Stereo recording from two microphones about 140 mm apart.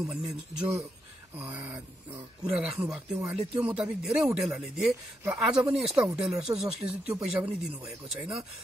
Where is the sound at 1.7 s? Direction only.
30° right (ahead or behind).